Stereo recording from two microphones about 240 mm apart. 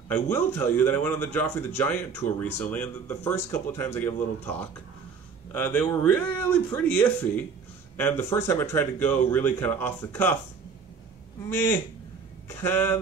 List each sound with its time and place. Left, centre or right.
0.1 s a man's voice: centre
12.4 s a man's voice: centre